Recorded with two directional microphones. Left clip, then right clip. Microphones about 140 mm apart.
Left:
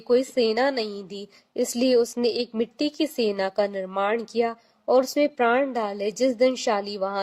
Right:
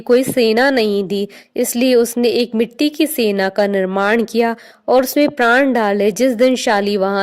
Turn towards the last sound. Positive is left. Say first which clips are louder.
# right 10 dB
turn(degrees=-50)  # may be behind; listen again after turning